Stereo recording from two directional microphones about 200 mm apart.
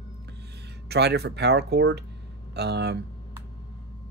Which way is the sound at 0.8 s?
55° right (ahead or behind).